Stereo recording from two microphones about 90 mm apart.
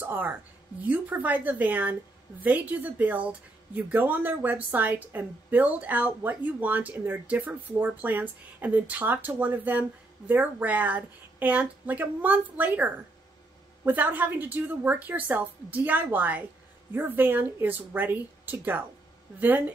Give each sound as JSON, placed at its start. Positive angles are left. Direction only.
{"t": 0.0, "sound": "speech", "side_deg": -20}